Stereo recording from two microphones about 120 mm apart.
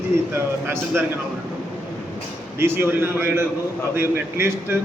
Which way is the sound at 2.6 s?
20° right (ahead or behind).